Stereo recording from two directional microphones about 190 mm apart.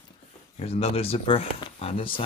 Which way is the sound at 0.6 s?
35° left (ahead or behind).